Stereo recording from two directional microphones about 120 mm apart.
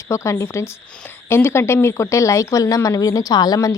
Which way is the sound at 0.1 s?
25° left (ahead or behind).